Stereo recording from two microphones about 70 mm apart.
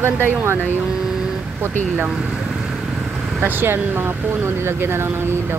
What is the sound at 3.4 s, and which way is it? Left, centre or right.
Speech, right.